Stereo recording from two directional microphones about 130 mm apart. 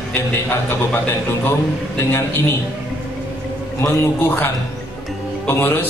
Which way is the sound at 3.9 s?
15° left (ahead or behind).